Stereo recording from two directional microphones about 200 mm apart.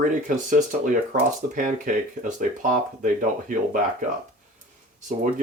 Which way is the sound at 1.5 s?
40° right (ahead or behind).